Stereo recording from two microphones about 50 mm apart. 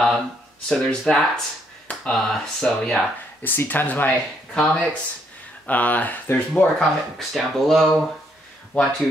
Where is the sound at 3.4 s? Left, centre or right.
Left.